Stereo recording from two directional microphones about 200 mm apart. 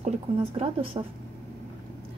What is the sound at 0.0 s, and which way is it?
A woman's voice, 30° right (ahead or behind).